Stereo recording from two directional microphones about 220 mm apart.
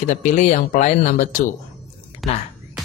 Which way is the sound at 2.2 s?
Centre (ahead or behind).